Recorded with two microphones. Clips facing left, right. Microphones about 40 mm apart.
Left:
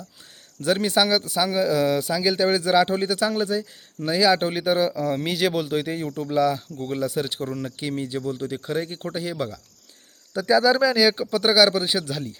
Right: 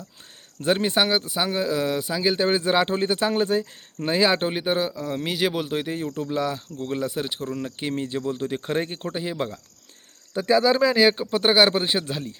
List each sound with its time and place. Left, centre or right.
0.6 s speech: right
4.4 s speech: centre
4.9 s speech: centre; by 9.0 s right
9.1 s speech: centre